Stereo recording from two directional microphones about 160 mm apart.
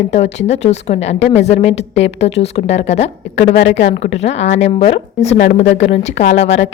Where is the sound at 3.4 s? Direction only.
80° left.